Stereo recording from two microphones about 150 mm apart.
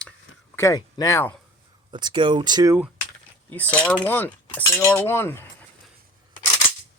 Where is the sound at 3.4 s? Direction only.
10° left (ahead or behind).